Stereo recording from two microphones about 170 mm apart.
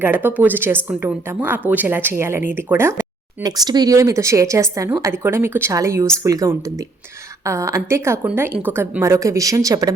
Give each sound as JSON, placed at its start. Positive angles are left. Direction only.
{"t": 0.0, "sound": "speech", "side_deg": -10}
{"t": 3.4, "sound": "speech", "side_deg": -25}